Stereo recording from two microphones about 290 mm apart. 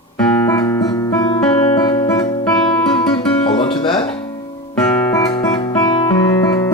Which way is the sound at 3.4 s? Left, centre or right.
Centre.